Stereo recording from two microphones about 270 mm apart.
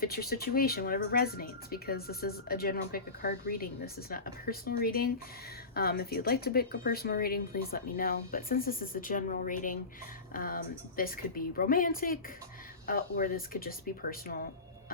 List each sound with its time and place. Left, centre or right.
0.0 s speech: left